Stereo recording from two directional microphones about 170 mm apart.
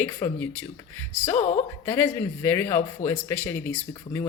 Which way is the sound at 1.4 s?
45° left (ahead or behind).